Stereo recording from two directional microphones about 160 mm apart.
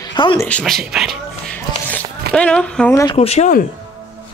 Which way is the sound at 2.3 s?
5° left (ahead or behind).